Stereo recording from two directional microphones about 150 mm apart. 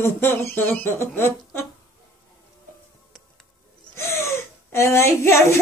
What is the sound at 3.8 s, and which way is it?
Gasp, 20° left (ahead or behind).